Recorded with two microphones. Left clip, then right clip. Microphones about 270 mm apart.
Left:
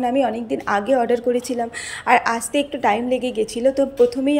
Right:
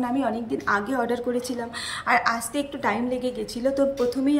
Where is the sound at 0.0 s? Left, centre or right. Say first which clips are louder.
Left 6 dB; centre.